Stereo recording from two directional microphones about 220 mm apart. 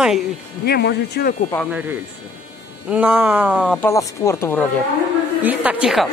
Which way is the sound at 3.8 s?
15° left (ahead or behind).